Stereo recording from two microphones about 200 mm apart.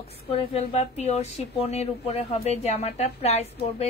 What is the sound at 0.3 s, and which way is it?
Speech, 30° left (ahead or behind).